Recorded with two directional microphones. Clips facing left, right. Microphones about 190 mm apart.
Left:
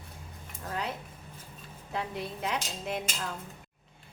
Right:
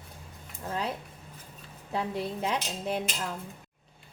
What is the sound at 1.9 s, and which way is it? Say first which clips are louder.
A woman's voice: right 4 dB; 30° right (ahead or behind).